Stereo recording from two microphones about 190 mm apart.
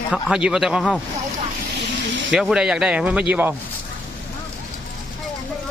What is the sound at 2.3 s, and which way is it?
Speech, 5° right (ahead or behind).